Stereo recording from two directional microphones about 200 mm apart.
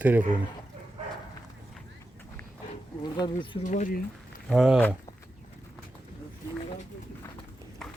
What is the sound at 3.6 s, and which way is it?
Speech, 40° left (ahead or behind).